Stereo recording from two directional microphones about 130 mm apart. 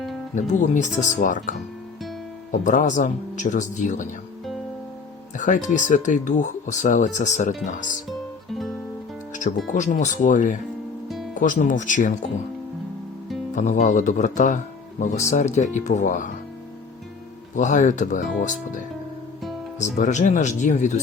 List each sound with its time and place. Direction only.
0.3 s speech: 70° left (ahead or behind)
5.4 s speech: 70° left (ahead or behind)
8.5 s music: centre (ahead or behind)
9.4 s speech: 70° left (ahead or behind)
13.6 s speech: 70° left (ahead or behind); by 16.3 s 90° left
17.5 s speech: 75° left (ahead or behind)
19.8 s speech: 65° left (ahead or behind)